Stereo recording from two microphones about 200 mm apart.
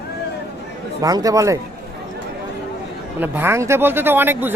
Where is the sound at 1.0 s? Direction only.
15° right (ahead or behind).